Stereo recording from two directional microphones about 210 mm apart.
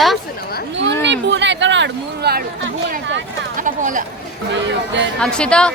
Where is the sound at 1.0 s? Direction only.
60° right (ahead or behind).